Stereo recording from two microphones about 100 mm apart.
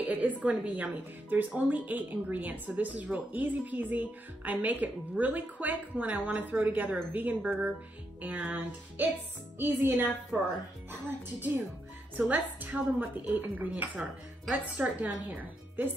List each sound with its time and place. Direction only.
0.0 s a woman's voice: 15° right (ahead or behind)